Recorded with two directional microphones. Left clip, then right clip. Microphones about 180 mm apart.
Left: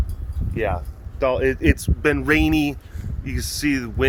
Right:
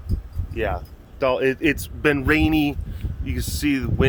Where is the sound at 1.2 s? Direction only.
5° right (ahead or behind).